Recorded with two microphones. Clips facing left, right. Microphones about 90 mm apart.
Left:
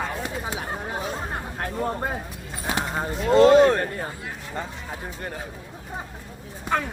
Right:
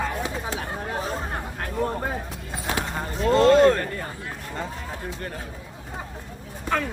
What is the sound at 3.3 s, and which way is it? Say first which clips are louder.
Speech: left 2 dB; 10° left (ahead or behind).